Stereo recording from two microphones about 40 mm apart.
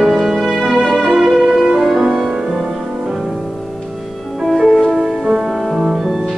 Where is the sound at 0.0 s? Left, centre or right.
Centre.